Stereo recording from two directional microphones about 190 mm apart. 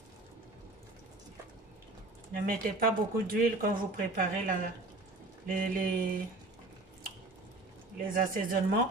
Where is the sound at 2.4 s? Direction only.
50° right (ahead or behind).